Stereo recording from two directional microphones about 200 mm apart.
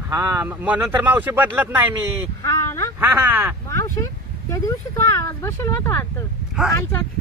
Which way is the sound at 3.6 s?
15° left (ahead or behind).